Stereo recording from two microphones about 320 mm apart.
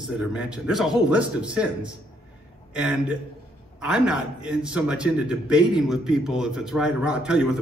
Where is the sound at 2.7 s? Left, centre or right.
Centre.